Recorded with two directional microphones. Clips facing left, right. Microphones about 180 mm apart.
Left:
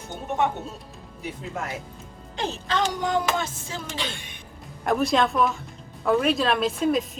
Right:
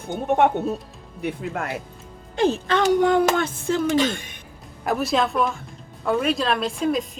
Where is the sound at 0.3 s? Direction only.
60° right (ahead or behind).